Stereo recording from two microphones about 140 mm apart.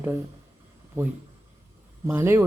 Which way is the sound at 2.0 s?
15° right (ahead or behind).